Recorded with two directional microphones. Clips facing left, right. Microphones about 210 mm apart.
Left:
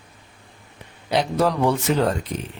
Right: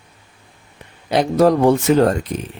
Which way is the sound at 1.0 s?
45° right (ahead or behind).